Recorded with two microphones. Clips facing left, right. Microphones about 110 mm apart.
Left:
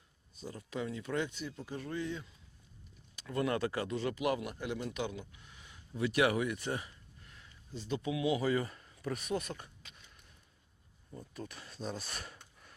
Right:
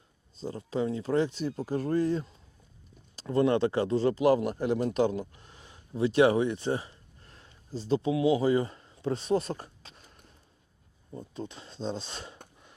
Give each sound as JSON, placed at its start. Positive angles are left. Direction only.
{"t": 0.3, "sound": "a man's voice", "side_deg": -30}
{"t": 11.1, "sound": "speech", "side_deg": -25}